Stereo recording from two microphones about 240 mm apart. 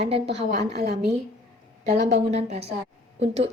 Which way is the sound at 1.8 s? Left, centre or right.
Right.